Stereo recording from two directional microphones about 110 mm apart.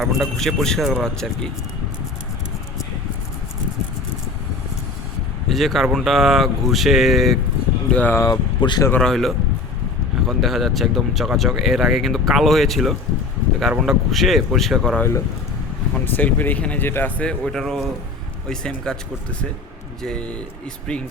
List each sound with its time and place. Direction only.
0.0 s speech: centre (ahead or behind)
5.5 s speech: centre (ahead or behind)
7.9 s speech: 15° left (ahead or behind)
8.2 s speech: 40° left (ahead or behind)
9.0 s speech: 5° left (ahead or behind)
16.0 s speech: 15° left (ahead or behind)
20.0 s speech: 5° left (ahead or behind)